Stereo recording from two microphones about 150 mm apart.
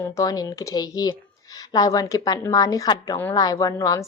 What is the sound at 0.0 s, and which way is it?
A woman's voice, 20° left (ahead or behind).